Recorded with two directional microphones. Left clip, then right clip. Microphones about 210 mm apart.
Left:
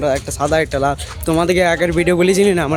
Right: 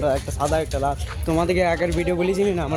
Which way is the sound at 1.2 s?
15° left (ahead or behind).